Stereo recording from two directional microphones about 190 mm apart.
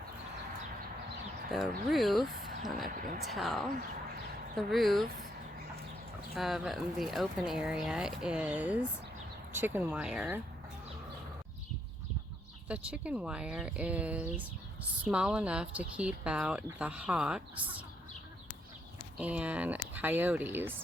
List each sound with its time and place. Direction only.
1.5 s speech: centre (ahead or behind)
2.9 s speech: 45° right (ahead or behind)
3.2 s speech: centre (ahead or behind)
6.3 s speech: centre (ahead or behind)
12.6 s speech: 5° right (ahead or behind)
19.1 s speech: 5° right (ahead or behind)